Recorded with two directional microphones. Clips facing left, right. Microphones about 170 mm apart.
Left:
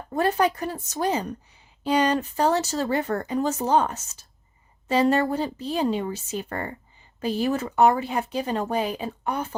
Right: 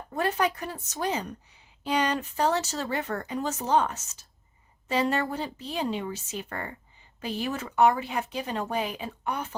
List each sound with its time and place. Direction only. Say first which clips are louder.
0.1 s speech: left 5 dB; 35° left (ahead or behind)